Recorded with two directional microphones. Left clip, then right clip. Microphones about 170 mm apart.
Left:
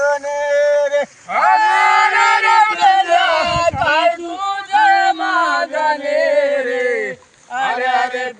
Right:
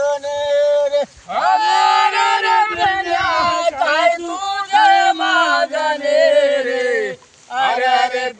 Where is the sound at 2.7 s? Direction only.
85° left.